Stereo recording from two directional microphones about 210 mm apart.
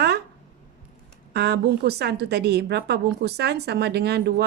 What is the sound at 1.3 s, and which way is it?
A woman's voice, 50° right (ahead or behind).